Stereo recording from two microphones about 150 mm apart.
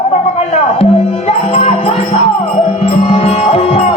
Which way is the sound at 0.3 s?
40° left (ahead or behind).